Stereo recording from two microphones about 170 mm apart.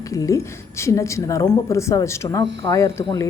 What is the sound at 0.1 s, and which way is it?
A woman's voice, 20° left (ahead or behind).